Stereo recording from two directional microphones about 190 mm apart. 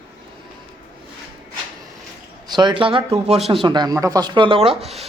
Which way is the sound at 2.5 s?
25° right (ahead or behind).